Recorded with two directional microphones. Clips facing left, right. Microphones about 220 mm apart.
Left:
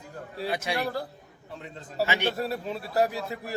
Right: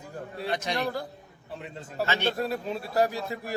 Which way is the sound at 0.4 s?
5° left (ahead or behind).